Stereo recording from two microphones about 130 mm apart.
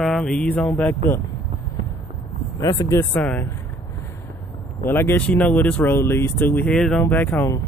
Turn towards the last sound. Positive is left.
turn(degrees=15)  # may be behind; listen again after turning